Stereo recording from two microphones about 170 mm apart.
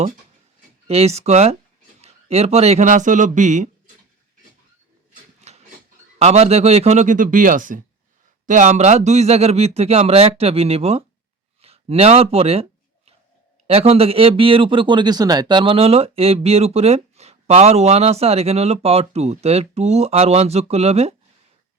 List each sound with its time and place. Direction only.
0.9 s speech: 35° right (ahead or behind)
6.1 s speech: 40° right (ahead or behind)
13.7 s speech: 35° right (ahead or behind)